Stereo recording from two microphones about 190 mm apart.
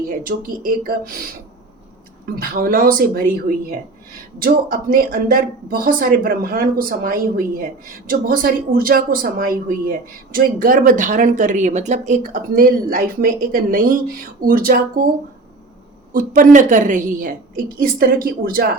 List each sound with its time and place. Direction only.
0.2 s speech: 50° right (ahead or behind)
2.2 s speech: 50° right (ahead or behind)
16.1 s speech: 45° right (ahead or behind)